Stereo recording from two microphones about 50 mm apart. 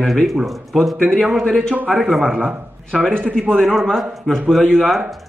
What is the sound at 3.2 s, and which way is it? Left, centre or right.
A man's voice, centre.